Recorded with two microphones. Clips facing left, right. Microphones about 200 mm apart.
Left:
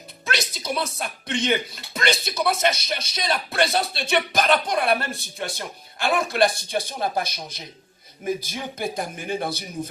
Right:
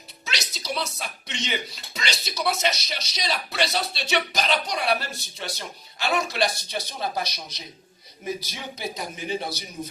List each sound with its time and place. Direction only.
0.3 s speech: 55° left (ahead or behind)